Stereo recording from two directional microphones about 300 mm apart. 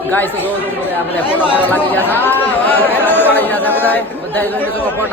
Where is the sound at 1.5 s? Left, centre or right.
Centre.